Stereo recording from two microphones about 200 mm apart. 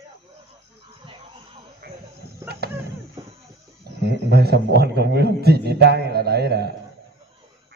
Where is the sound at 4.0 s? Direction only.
55° right (ahead or behind).